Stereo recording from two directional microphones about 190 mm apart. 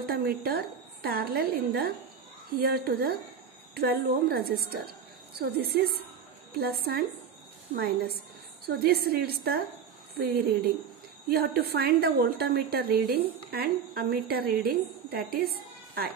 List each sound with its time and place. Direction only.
0.0 s a woman's voice: 50° right (ahead or behind)
8.6 s a woman's voice: 55° right (ahead or behind)